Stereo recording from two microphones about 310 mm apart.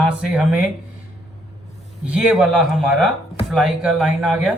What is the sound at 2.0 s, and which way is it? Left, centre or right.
A man's voice, centre.